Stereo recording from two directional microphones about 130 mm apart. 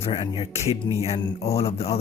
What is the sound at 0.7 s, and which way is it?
Speech, 25° right (ahead or behind).